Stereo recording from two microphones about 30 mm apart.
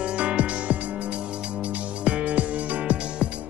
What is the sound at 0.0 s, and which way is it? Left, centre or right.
Music, right.